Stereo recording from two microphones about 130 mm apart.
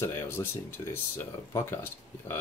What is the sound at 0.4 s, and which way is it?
Speech, 25° left (ahead or behind).